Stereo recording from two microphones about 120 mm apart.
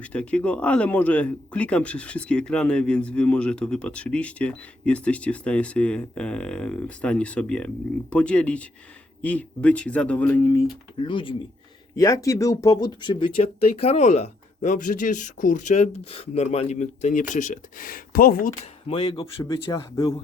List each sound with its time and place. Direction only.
0.0 s speech: 10° left (ahead or behind)
11.0 s speech: 45° left (ahead or behind)
11.9 s speech: 25° left (ahead or behind); by 17.6 s 90° left
18.9 s speech: 55° left (ahead or behind)